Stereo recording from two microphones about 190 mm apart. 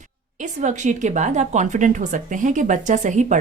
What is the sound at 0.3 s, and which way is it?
Speech, 40° right (ahead or behind).